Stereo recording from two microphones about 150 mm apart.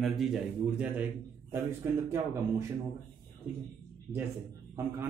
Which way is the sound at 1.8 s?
20° right (ahead or behind).